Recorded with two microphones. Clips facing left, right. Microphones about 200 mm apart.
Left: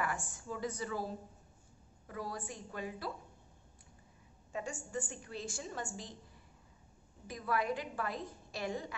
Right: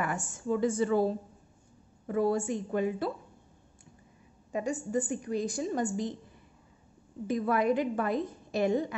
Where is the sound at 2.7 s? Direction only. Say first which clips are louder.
Right 11 dB; 20° right (ahead or behind).